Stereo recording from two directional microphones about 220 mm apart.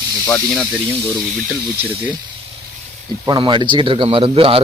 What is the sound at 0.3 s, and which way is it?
Speech, 5° left (ahead or behind).